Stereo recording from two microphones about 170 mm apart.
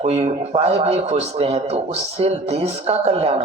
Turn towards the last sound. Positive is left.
turn(degrees=-40)  # may be behind; listen again after turning